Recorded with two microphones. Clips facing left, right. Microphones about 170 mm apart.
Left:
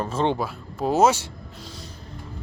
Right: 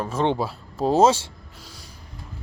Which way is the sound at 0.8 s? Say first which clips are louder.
Right 2 dB; 30° right (ahead or behind).